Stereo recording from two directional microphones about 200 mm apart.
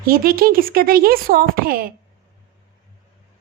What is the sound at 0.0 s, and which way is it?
Speech, 45° right (ahead or behind).